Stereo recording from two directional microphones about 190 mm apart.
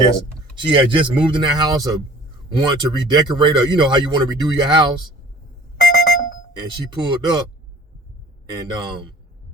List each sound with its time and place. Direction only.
0.5 s speech: 25° right (ahead or behind)
5.8 s a sound: 50° left (ahead or behind)
6.6 s speech: 25° right (ahead or behind)
8.4 s speech: 20° right (ahead or behind)